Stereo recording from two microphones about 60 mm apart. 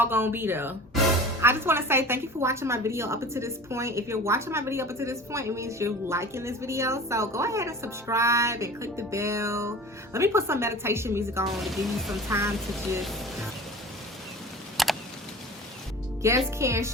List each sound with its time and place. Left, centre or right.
0.0 s a woman's voice: right
11.6 s speech: centre
14.8 s a sound: centre
16.2 s a woman's voice: right